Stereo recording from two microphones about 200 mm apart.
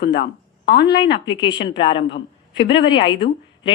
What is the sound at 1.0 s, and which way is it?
Speech, 60° left (ahead or behind).